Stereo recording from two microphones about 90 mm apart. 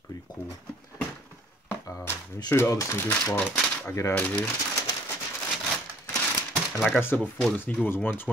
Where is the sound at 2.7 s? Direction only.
35° left (ahead or behind).